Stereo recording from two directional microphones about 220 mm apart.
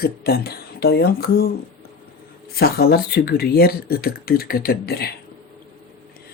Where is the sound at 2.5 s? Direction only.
45° left (ahead or behind).